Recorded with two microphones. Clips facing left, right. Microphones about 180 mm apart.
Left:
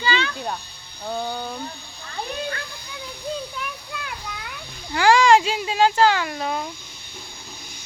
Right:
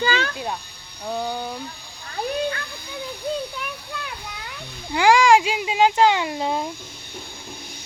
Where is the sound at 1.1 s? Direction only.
5° right (ahead or behind).